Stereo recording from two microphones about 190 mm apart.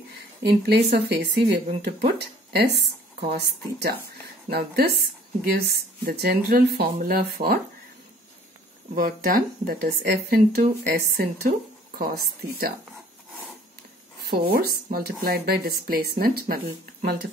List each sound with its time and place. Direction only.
0.4 s speech: 55° right (ahead or behind)
8.9 s speech: 50° right (ahead or behind)
14.3 s speech: 55° right (ahead or behind)